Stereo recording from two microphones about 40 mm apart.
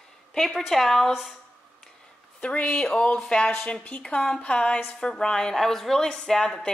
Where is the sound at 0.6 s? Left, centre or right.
Centre.